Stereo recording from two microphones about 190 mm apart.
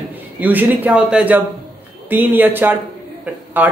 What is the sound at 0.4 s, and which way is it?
Speech, 10° right (ahead or behind).